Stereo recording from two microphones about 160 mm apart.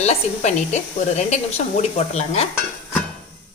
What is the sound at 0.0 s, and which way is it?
Speech, 45° left (ahead or behind).